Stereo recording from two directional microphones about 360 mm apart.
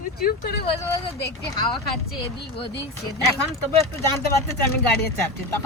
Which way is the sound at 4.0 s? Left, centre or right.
Centre.